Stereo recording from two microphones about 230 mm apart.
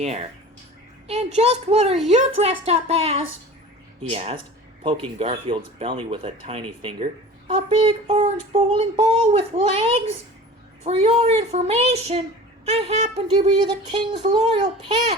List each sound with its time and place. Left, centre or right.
0.0 s a child's voice: right